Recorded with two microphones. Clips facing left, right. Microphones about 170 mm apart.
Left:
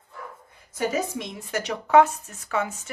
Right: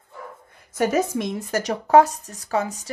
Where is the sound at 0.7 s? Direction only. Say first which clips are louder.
Right 5 dB; 50° right (ahead or behind).